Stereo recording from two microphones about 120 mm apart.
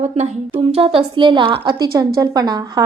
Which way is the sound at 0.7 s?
50° right (ahead or behind).